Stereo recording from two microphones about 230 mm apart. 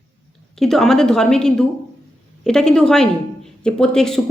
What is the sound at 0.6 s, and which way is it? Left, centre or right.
Speech, centre.